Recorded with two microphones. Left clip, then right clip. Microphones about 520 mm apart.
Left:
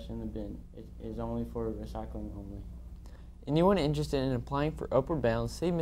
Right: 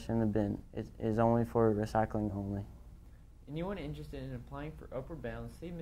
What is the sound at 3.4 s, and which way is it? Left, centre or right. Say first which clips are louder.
Speech: left 14 dB; left.